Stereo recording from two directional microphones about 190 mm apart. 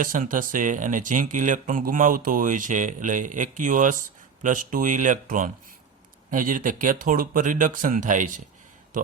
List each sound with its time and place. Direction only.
0.0 s speech: 45° right (ahead or behind)